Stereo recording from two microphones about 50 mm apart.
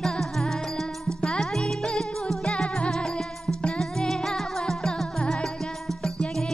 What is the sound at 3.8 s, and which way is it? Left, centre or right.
Music, centre.